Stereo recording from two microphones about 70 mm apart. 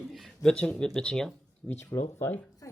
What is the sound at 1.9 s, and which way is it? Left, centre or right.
Speech, left.